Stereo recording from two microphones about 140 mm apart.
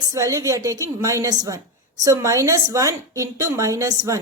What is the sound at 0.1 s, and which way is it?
A woman's voice, 20° right (ahead or behind).